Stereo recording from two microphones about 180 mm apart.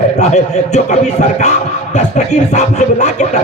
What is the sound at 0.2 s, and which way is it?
A man's voice, 40° left (ahead or behind).